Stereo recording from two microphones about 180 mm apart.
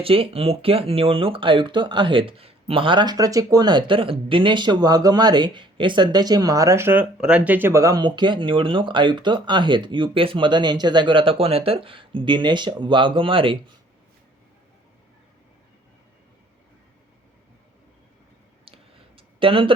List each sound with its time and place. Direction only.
0.0 s speech: 30° right (ahead or behind)
18.6 s clicking: 30° right (ahead or behind)